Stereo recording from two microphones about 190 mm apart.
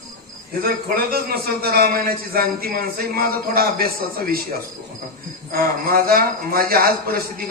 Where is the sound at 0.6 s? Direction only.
50° right (ahead or behind).